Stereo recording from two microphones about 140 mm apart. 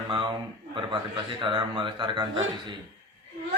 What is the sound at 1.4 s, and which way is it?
Speech, 35° right (ahead or behind).